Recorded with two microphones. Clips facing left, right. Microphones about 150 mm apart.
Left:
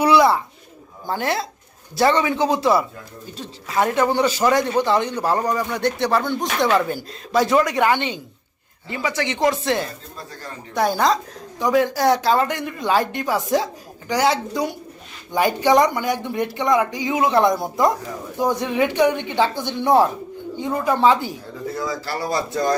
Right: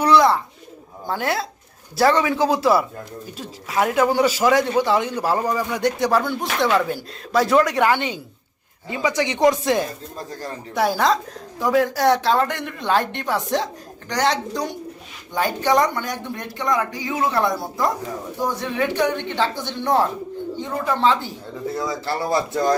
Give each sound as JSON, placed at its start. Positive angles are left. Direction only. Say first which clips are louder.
{"t": 0.0, "sound": "bird", "louder": "left 1 dB", "side_deg": 10}
{"t": 1.0, "sound": "a man's voice", "louder": "even", "side_deg": 0}
{"t": 10.8, "sound": "a man's voice", "louder": "even", "side_deg": -5}
{"t": 21.8, "sound": "speech", "louder": "right 1 dB", "side_deg": -25}